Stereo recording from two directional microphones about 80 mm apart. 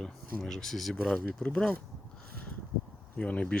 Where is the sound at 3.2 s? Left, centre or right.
Centre.